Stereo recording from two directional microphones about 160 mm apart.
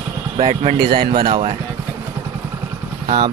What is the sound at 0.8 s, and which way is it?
Speech, 30° right (ahead or behind).